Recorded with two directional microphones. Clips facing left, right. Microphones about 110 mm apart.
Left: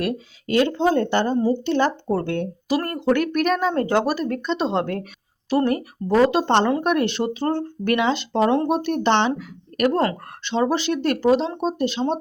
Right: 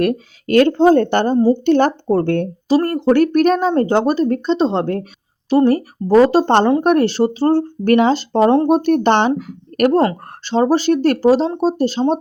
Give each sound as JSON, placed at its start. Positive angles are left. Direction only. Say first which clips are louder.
{"t": 0.0, "sound": "speech", "louder": "right 8 dB", "side_deg": -60}
{"t": 1.4, "sound": "a woman's voice", "louder": "right 7 dB", "side_deg": -45}
{"t": 2.6, "sound": "speech", "louder": "right 7 dB", "side_deg": -30}
{"t": 10.0, "sound": "speech", "louder": "right 5 dB", "side_deg": -35}